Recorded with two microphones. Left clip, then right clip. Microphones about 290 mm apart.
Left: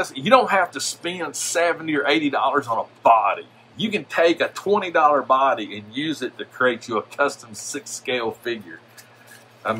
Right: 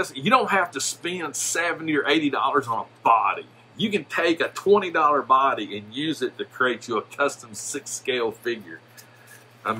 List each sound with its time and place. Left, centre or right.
0.0 s speech: centre
9.6 s speech: centre